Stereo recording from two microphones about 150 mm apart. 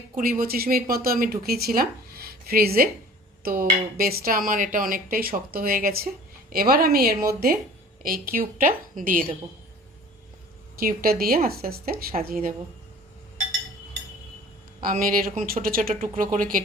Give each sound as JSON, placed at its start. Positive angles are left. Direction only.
{"t": 0.2, "sound": "speech", "side_deg": -70}
{"t": 10.8, "sound": "speech", "side_deg": -75}
{"t": 14.8, "sound": "speech", "side_deg": -70}